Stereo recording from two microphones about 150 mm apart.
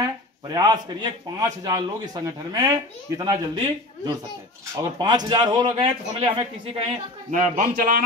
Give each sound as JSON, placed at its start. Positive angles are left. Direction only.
{"t": 0.0, "sound": "a man's voice", "side_deg": -25}
{"t": 7.2, "sound": "speech", "side_deg": -55}